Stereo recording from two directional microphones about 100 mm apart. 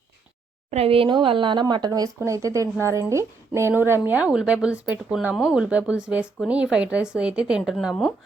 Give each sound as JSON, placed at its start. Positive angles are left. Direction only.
{"t": 0.7, "sound": "a woman's voice", "side_deg": -80}